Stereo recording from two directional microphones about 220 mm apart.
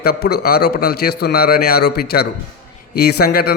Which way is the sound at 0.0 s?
45° left (ahead or behind).